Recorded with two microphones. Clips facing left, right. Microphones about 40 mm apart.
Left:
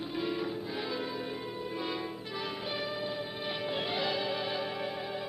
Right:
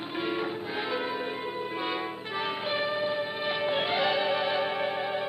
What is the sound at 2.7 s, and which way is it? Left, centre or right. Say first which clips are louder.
Music: right 8 dB; right.